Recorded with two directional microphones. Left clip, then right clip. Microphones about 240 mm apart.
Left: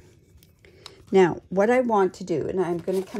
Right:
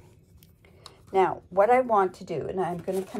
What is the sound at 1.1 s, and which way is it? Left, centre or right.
Speech, left.